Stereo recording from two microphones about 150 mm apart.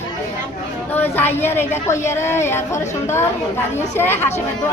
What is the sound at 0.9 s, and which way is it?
A woman's voice, 15° left (ahead or behind).